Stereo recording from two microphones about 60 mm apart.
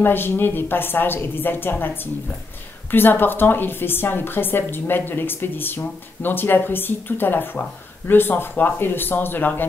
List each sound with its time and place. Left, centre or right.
0.0 s a woman's voice: left
2.9 s a woman's voice: left